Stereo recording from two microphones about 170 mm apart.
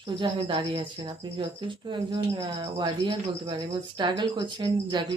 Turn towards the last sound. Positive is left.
turn(degrees=-25)  # may be behind; listen again after turning